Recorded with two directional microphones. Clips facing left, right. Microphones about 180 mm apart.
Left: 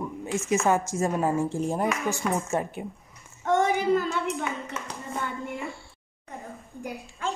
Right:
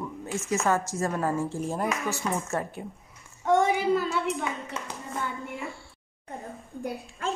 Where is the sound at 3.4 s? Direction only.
5° right (ahead or behind).